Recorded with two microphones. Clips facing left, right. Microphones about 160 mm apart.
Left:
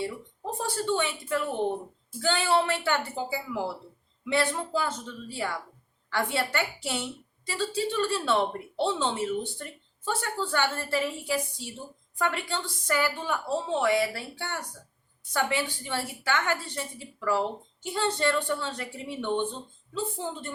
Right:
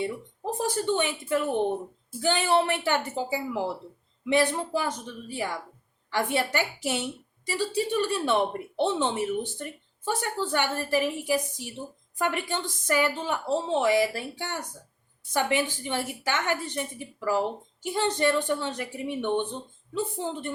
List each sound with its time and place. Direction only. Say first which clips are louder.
0.6 s a woman's voice: right 2 dB; 20° right (ahead or behind)